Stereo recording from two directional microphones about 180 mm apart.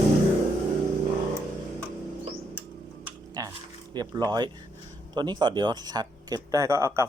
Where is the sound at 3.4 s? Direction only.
20° right (ahead or behind).